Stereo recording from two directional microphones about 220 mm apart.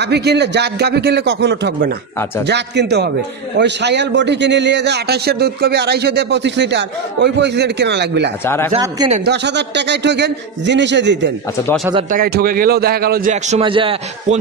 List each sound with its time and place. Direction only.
0.0 s a man's voice: 50° right (ahead or behind)
8.5 s speech: 10° left (ahead or behind)
8.7 s a man's voice: 25° right (ahead or behind)
9.2 s a man's voice: 50° right (ahead or behind)
12.1 s a man's voice: 45° right (ahead or behind); by 14.4 s 25° right (ahead or behind)